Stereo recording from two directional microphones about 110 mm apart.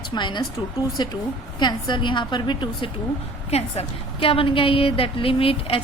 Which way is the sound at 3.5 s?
65° left (ahead or behind).